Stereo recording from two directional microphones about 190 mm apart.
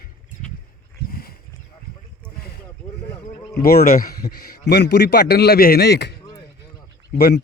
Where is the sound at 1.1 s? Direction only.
50° left (ahead or behind).